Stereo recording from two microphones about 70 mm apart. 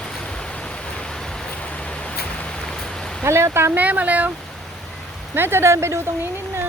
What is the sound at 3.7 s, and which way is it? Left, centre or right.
Speech, right.